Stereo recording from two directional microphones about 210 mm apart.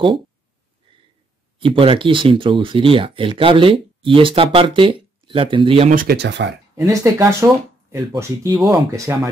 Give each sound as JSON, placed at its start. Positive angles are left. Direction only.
{"t": 0.8, "sound": "a sound", "side_deg": -25}
{"t": 1.6, "sound": "speech", "side_deg": -25}
{"t": 5.9, "sound": "speech", "side_deg": -50}
{"t": 6.7, "sound": "speech", "side_deg": -15}